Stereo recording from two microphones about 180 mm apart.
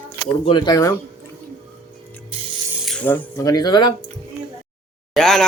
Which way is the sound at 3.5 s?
20° left (ahead or behind).